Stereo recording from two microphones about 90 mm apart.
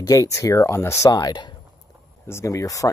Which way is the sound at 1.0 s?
45° left (ahead or behind).